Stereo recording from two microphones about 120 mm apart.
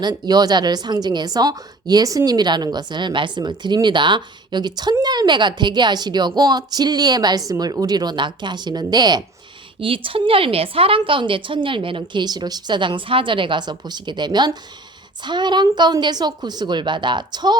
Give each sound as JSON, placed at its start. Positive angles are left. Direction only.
{"t": 0.0, "sound": "a woman's voice", "side_deg": -35}
{"t": 9.8, "sound": "a woman's voice", "side_deg": -45}